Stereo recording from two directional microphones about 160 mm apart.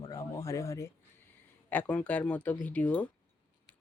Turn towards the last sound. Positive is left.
turn(degrees=10)  # may be behind; listen again after turning